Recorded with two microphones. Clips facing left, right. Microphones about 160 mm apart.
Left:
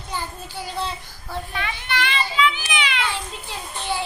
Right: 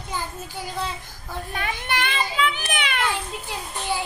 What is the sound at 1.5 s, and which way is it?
A child's voice, 45° right (ahead or behind).